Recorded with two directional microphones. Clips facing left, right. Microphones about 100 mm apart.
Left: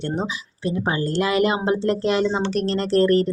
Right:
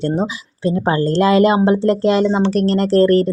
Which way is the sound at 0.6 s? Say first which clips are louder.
Right 7 dB; 35° right (ahead or behind).